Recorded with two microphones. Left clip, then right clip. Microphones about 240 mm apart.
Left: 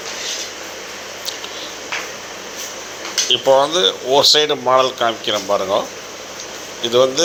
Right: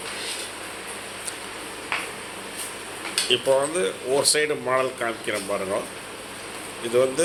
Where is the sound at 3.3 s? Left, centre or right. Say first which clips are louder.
Left 8 dB; centre.